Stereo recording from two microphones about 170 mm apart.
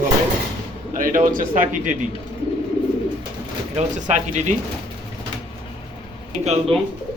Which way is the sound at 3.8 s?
45° right (ahead or behind).